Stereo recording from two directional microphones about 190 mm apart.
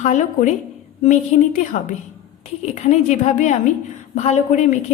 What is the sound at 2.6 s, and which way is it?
A man's voice, 35° left (ahead or behind).